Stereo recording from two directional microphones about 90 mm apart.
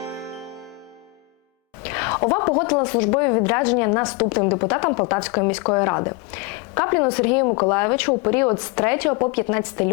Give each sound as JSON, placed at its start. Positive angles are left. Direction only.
{"t": 1.8, "sound": "speech", "side_deg": 25}